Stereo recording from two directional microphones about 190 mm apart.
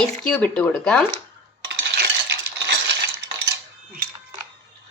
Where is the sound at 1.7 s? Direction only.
65° right (ahead or behind).